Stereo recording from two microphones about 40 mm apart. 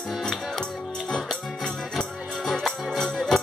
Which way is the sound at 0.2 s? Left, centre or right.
Centre.